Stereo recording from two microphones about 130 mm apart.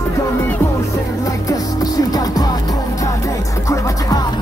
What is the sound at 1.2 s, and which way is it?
Music, 30° left (ahead or behind).